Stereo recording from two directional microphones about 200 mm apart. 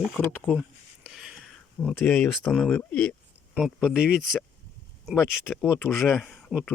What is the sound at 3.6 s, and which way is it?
Speech, centre (ahead or behind).